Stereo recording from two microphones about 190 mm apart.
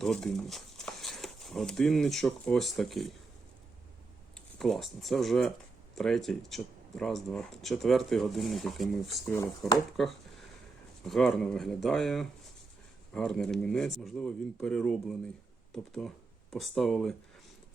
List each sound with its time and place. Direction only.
0.0 s speech: 5° left (ahead or behind)
4.5 s speech: centre (ahead or behind)
9.3 s speech: 15° left (ahead or behind)
11.0 s speech: centre (ahead or behind)